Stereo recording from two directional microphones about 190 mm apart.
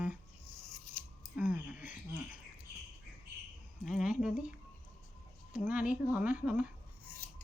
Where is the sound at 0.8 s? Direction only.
40° left (ahead or behind).